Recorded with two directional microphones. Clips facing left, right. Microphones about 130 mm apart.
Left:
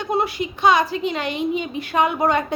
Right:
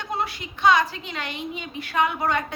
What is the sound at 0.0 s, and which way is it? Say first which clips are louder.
A woman's voice: left 7 dB; 15° left (ahead or behind).